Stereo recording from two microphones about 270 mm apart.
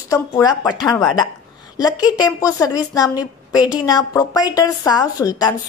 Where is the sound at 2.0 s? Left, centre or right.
Centre.